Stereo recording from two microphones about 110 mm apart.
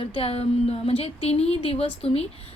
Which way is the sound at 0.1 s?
60° left (ahead or behind).